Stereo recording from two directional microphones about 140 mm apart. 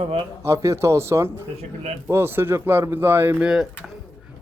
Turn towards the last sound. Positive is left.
turn(degrees=-5)  # may be behind; listen again after turning